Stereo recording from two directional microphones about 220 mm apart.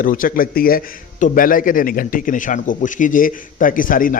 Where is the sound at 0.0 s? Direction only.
40° left (ahead or behind).